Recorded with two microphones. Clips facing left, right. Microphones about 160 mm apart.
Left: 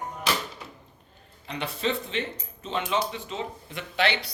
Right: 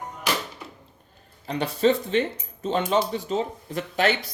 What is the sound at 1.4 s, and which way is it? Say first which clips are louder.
Speech: right 8 dB; 40° right (ahead or behind).